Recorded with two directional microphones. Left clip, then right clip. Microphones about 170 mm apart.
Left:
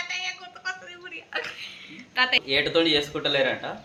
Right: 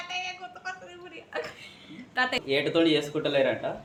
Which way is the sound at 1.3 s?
20° right (ahead or behind).